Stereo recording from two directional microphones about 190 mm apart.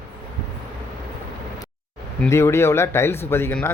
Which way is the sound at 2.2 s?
15° left (ahead or behind).